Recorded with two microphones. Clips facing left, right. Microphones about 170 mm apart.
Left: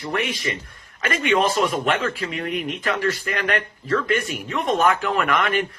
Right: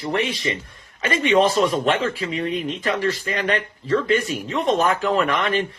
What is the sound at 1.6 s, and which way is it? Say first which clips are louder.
Speech: right 2 dB; 30° right (ahead or behind).